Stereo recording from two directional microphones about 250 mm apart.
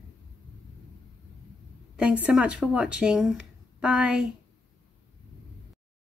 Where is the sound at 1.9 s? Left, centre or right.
Centre.